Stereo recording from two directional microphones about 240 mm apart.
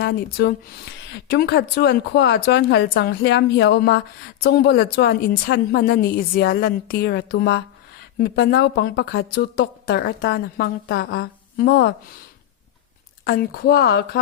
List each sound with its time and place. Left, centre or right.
0.0 s a woman's voice: left
13.2 s speech: left